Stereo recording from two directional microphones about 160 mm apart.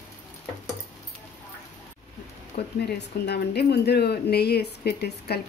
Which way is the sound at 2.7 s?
90° left.